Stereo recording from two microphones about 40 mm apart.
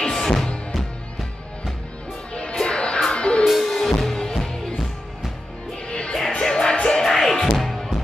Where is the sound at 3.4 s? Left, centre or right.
Centre.